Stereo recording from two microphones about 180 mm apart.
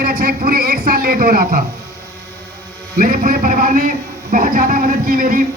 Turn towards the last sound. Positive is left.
turn(degrees=-50)  # may be behind; listen again after turning